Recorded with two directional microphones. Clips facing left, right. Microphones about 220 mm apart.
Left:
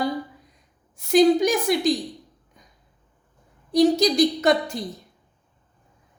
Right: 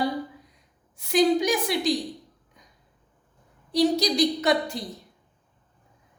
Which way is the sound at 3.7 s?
45° left (ahead or behind).